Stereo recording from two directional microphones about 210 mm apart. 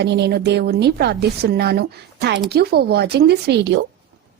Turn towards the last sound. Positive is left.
turn(degrees=-55)  # may be behind; listen again after turning